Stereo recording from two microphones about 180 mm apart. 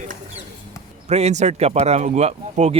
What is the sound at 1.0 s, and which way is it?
Speech, 35° right (ahead or behind).